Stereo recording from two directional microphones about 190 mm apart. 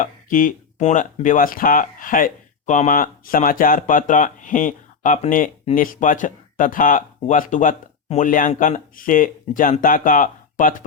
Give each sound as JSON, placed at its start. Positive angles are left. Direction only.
{"t": 0.0, "sound": "speech", "side_deg": 45}